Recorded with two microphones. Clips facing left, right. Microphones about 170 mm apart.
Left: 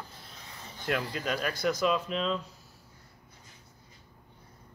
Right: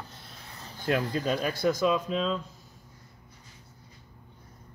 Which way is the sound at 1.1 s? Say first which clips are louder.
Right 4 dB; 35° right (ahead or behind).